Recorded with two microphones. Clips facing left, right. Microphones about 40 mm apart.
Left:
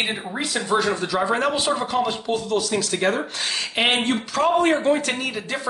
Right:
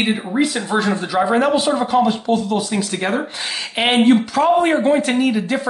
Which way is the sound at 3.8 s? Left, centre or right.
Centre.